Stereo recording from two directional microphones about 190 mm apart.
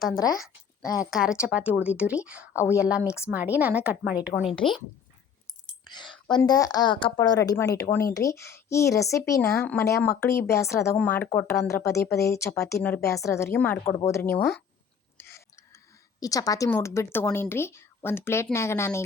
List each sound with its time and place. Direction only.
0.3 s a woman's voice: centre (ahead or behind)
6.2 s speech: 20° left (ahead or behind)
15.2 s a sound: 15° left (ahead or behind)
16.2 s speech: 20° left (ahead or behind)